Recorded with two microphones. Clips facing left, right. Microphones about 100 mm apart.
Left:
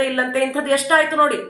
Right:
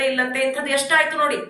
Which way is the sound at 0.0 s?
35° left (ahead or behind).